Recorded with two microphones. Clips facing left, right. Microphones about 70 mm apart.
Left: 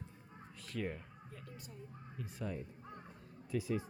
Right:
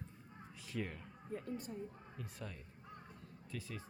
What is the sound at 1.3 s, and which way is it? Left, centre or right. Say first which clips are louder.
Speech: right 11 dB; right.